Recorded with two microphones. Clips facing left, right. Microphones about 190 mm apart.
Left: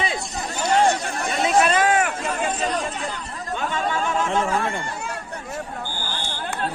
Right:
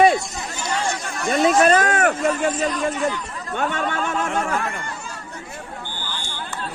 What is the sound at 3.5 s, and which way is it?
Speech, 55° right (ahead or behind).